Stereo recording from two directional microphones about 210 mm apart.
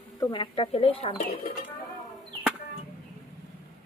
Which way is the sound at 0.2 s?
20° left (ahead or behind).